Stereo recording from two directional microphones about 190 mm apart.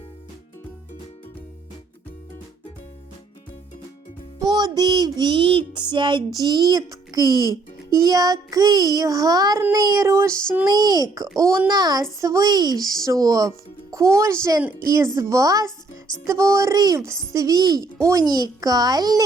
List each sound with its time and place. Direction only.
4.4 s music: 20° right (ahead or behind)
7.9 s speech: 20° right (ahead or behind)